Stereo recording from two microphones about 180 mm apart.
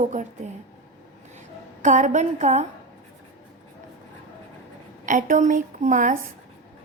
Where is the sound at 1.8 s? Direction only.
45° right (ahead or behind).